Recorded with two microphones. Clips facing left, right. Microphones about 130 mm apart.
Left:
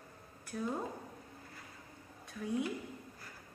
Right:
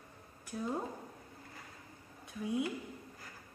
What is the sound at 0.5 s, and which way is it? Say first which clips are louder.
Speech: left 1 dB; 15° right (ahead or behind).